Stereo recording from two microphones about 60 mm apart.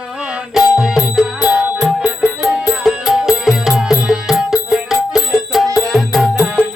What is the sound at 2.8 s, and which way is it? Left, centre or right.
Music, centre.